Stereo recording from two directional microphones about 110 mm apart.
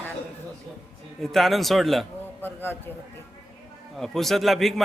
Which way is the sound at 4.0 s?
5° left (ahead or behind).